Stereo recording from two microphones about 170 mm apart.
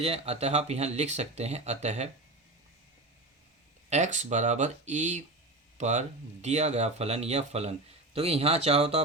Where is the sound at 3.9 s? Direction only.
45° right (ahead or behind).